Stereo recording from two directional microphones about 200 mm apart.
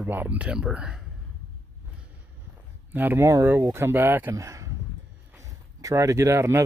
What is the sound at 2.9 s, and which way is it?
Speech, 10° right (ahead or behind).